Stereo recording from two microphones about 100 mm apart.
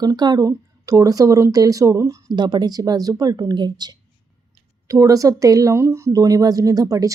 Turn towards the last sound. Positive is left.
turn(degrees=-35)  # may be behind; listen again after turning